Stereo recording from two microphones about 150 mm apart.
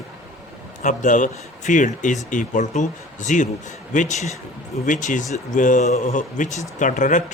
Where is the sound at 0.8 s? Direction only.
55° left (ahead or behind).